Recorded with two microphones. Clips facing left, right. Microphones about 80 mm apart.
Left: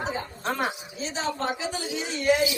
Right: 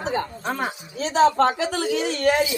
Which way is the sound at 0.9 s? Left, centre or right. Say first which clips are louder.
Right 17 dB; right.